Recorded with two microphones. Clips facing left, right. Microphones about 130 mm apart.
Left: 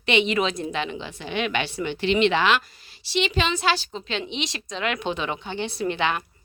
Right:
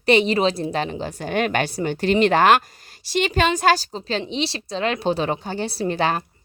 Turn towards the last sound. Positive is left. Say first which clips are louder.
# right 3 dB
turn(degrees=-40)  # may be behind; listen again after turning